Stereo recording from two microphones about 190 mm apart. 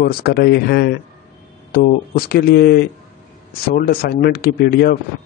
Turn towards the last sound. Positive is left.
turn(degrees=55)  # may be behind; listen again after turning